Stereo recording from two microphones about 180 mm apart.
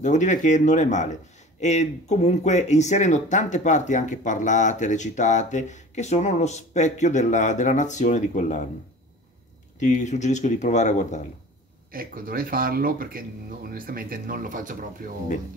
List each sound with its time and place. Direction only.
0.0 s speech: 40° left (ahead or behind)
9.8 s speech: 40° left (ahead or behind)
11.9 s speech: 55° right (ahead or behind)